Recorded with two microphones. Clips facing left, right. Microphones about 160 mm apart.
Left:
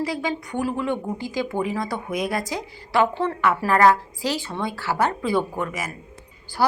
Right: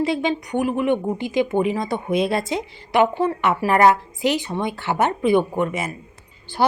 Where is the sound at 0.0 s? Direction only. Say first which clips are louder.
Right 5 dB; 25° right (ahead or behind).